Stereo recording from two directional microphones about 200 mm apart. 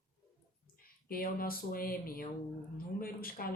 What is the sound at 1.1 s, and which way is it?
Speech, 45° left (ahead or behind).